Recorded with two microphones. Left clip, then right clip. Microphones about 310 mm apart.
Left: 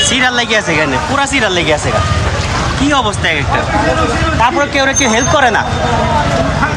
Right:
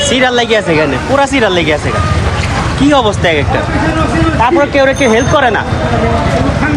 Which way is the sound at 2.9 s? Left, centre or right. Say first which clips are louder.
Right 4 dB; centre.